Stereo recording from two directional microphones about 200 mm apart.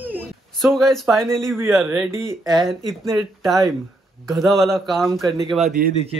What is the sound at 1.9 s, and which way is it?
Speech, 15° right (ahead or behind).